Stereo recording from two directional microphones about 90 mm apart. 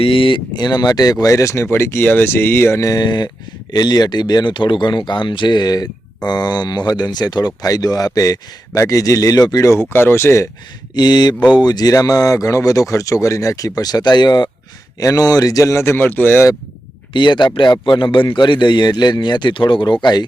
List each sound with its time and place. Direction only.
0.0 s speech: 75° left (ahead or behind); by 3.0 s 35° left (ahead or behind)
3.0 s speech: 55° left (ahead or behind); by 10.5 s 30° left (ahead or behind)
10.9 s speech: 50° left (ahead or behind); by 16.5 s 25° left (ahead or behind)
17.2 s speech: 60° left (ahead or behind)